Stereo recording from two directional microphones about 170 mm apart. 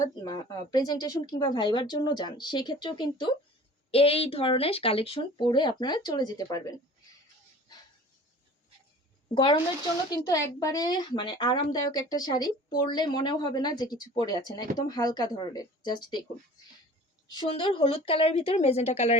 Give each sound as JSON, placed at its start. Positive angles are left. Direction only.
{"t": 0.0, "sound": "a woman's voice", "side_deg": 20}
{"t": 9.3, "sound": "a woman's voice", "side_deg": 30}
{"t": 17.2, "sound": "speech", "side_deg": 25}